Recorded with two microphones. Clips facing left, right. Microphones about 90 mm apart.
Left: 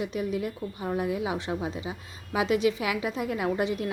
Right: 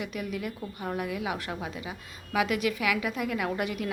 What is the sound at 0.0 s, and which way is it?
A woman's voice, 30° left (ahead or behind).